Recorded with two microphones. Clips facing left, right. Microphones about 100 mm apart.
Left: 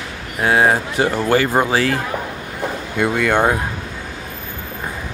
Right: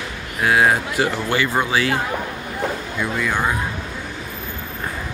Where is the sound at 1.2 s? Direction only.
40° left (ahead or behind).